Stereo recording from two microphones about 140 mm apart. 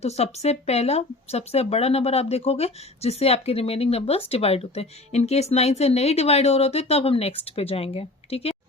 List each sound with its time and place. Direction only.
0.0 s speech: 50° left (ahead or behind)